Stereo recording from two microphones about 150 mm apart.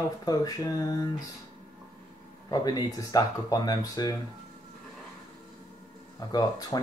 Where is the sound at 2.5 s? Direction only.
25° left (ahead or behind).